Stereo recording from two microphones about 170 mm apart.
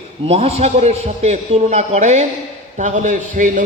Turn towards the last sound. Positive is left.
turn(degrees=-50)  # may be behind; listen again after turning